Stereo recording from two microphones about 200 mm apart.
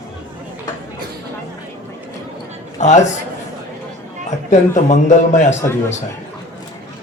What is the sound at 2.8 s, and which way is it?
Speech, 35° left (ahead or behind).